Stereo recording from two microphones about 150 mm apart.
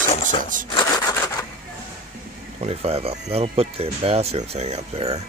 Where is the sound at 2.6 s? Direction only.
45° right (ahead or behind).